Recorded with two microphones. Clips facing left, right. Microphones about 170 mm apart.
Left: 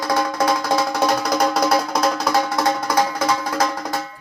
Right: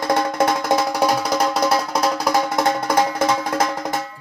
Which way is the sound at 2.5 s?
25° right (ahead or behind).